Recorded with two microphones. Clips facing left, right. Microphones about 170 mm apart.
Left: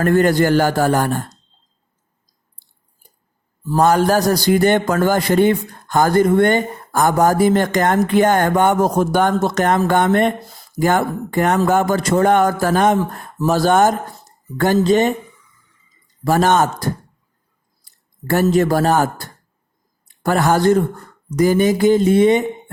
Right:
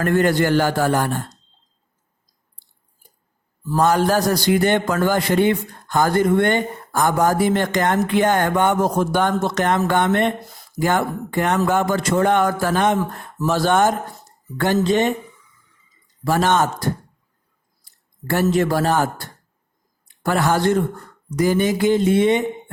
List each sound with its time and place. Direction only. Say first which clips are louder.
0.0 s a man's voice: left 3 dB; 45° left (ahead or behind)
3.8 s a man's voice: left 3 dB; 45° left (ahead or behind)
16.2 s a man's voice: left 3 dB; 45° left (ahead or behind)
18.3 s a man's voice: left 3 dB; 45° left (ahead or behind)
20.1 s speech: left 3 dB; 45° left (ahead or behind)